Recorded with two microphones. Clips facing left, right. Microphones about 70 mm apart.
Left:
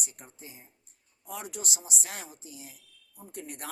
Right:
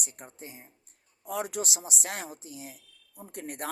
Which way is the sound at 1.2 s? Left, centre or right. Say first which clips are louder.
Right 7 dB; right.